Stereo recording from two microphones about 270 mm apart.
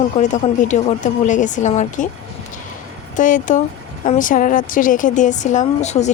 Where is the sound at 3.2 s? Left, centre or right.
Left.